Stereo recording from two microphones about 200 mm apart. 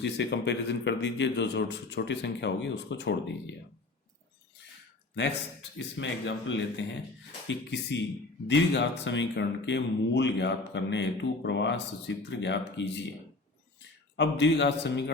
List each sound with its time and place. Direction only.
0.0 s speech: 60° left (ahead or behind)
6.0 s speech: 65° left (ahead or behind)
14.2 s speech: 60° left (ahead or behind)